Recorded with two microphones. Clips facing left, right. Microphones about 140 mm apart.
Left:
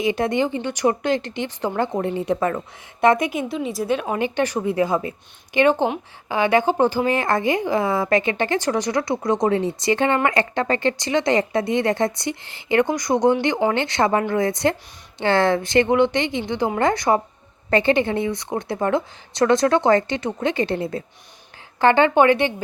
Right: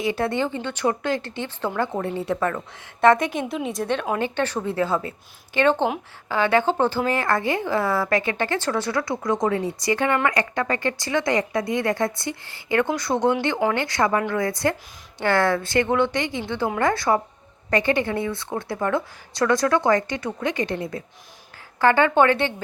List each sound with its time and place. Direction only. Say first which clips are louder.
0.0 s a woman's voice: left 3 dB; 20° left (ahead or behind)
3.5 s a woman's voice: left 2 dB; centre (ahead or behind)